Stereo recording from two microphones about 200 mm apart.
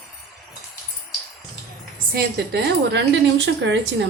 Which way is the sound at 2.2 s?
55° right (ahead or behind).